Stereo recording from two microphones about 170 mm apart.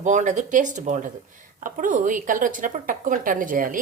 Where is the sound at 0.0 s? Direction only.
45° right (ahead or behind).